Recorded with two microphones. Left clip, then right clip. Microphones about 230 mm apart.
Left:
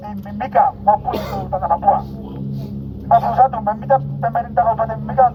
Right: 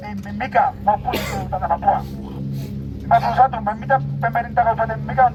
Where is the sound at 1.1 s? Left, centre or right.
Right.